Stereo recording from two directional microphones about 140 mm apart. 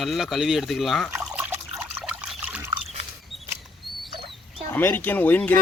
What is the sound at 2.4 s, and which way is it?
Pig, 10° right (ahead or behind).